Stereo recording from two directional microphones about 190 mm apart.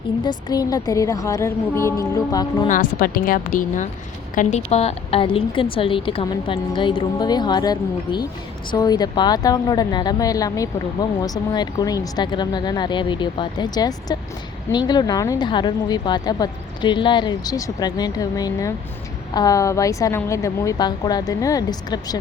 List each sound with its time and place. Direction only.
0.3 s a woman's voice: 20° left (ahead or behind)
2.6 s speech: 45° left (ahead or behind); by 22.2 s 20° left (ahead or behind)